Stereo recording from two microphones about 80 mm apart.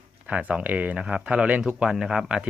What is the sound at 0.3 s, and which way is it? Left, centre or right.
Speech, centre.